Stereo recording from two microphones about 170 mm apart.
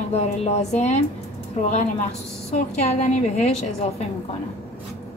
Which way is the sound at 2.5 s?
40° left (ahead or behind).